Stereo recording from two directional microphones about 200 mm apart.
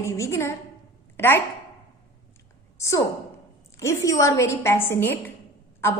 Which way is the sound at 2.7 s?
15° left (ahead or behind).